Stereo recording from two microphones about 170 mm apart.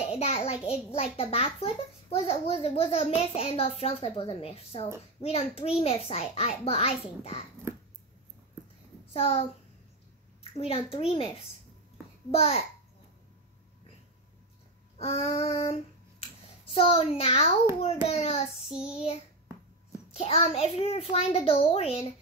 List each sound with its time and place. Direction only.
0.0 s a child's voice: 40° left (ahead or behind)
9.1 s a child's voice: 35° left (ahead or behind)
10.6 s a child's voice: 35° left (ahead or behind)
12.3 s a child's voice: 35° left (ahead or behind)
15.0 s a sound: 35° left (ahead or behind)
16.7 s a child's voice: 35° left (ahead or behind)
20.1 s a child's voice: 35° left (ahead or behind)